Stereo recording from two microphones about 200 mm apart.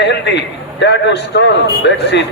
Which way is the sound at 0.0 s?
60° left (ahead or behind).